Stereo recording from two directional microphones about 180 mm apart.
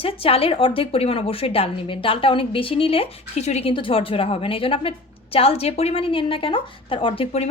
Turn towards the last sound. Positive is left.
turn(degrees=35)  # may be behind; listen again after turning